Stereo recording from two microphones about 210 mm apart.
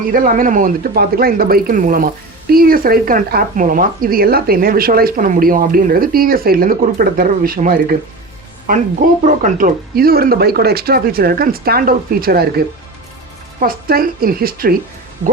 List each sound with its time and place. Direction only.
0.1 s speech: 40° right (ahead or behind)